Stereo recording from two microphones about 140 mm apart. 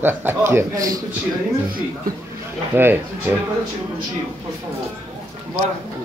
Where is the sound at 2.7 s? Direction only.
15° right (ahead or behind).